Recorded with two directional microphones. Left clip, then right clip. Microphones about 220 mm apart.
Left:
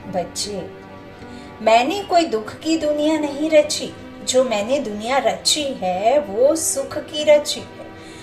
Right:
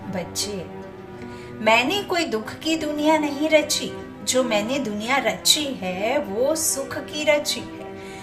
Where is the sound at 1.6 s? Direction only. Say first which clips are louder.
Left 3 dB; 15° right (ahead or behind).